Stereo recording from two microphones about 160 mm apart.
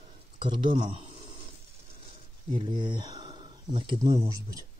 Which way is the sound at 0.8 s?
35° right (ahead or behind).